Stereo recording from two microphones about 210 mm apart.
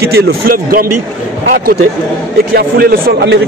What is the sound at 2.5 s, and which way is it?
Speech, 45° right (ahead or behind).